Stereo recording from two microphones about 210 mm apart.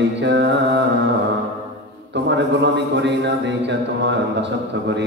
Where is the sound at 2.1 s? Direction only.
55° right (ahead or behind).